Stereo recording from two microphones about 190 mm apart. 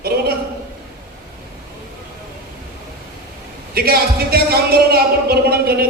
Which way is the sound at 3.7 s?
55° right (ahead or behind).